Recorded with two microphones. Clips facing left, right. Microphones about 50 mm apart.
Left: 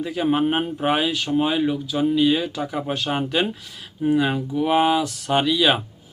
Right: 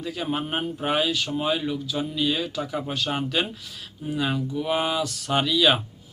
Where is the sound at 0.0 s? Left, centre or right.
Centre.